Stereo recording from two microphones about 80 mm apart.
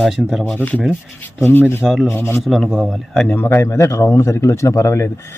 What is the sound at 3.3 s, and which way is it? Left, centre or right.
A man's voice, left.